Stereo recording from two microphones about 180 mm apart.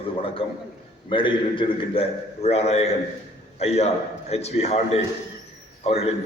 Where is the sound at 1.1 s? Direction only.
25° left (ahead or behind).